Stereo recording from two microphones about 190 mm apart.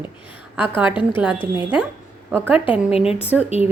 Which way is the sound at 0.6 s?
10° right (ahead or behind).